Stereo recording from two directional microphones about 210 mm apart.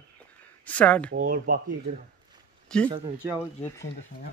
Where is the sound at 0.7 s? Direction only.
5° left (ahead or behind).